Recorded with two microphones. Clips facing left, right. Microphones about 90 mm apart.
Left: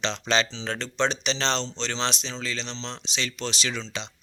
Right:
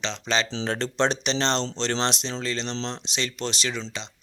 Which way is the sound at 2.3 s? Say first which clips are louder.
Right 4 dB; 55° right (ahead or behind).